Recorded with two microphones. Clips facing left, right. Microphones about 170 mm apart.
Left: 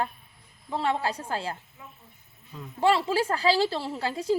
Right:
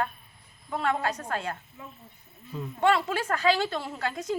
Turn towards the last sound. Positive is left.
turn(degrees=30)  # may be behind; listen again after turning